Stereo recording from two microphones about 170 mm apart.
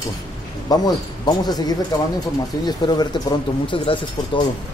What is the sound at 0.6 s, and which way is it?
Speech, 25° left (ahead or behind).